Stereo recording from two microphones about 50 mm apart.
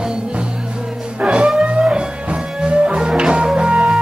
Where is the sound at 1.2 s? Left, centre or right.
Right.